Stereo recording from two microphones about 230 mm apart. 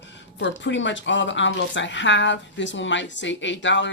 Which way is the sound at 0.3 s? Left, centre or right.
Left.